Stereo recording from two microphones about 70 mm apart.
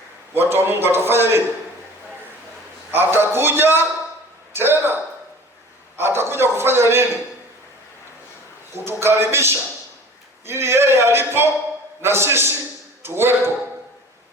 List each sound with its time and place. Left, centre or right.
0.3 s a man's voice: right
2.9 s a man's voice: right
6.0 s a man's voice: right
8.7 s a man's voice: right